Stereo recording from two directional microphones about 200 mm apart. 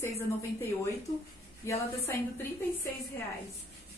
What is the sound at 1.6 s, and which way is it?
Speech, 15° left (ahead or behind).